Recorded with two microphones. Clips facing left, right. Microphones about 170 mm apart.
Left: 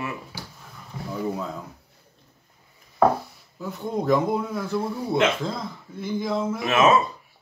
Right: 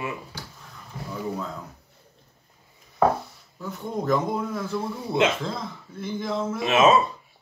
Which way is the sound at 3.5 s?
Centre (ahead or behind).